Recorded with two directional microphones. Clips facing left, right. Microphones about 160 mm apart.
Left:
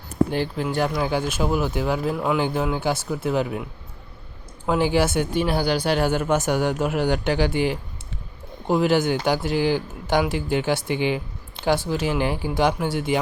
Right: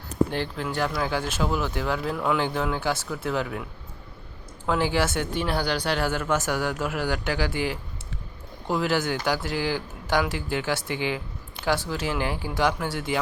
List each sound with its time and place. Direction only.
0.3 s speech: 15° left (ahead or behind)